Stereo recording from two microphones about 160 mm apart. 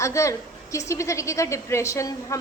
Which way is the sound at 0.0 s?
20° left (ahead or behind).